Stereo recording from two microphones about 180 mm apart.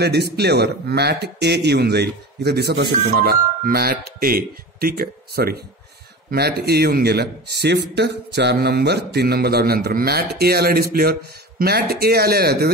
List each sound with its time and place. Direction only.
0.0 s a man's voice: 65° right (ahead or behind)